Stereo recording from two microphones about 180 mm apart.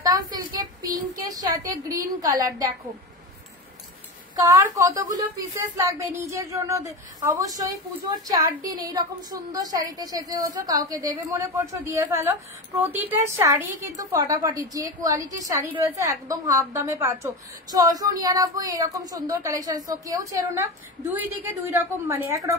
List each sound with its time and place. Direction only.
0.0 s a sound: 20° right (ahead or behind)
4.4 s a woman's voice: 15° right (ahead or behind)
8.7 s a woman's voice: 20° right (ahead or behind)